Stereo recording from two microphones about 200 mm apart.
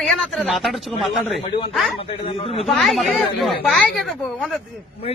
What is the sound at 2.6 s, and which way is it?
A man's voice, centre (ahead or behind).